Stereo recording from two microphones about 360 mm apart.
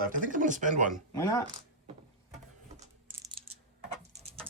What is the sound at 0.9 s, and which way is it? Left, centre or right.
Speech, centre.